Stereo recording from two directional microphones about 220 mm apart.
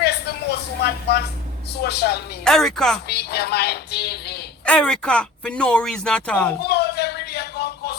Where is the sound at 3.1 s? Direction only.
50° left (ahead or behind).